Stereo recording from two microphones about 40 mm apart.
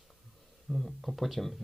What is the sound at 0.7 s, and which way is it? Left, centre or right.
Speech, centre.